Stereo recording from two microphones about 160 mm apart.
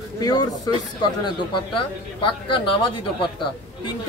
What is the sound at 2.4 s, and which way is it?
Speech, 30° left (ahead or behind).